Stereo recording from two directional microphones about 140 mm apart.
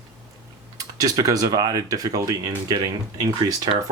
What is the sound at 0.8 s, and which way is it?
Speech, 25° right (ahead or behind).